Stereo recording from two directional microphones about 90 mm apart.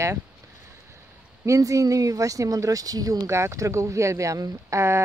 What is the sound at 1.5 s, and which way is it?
Speech, 35° right (ahead or behind).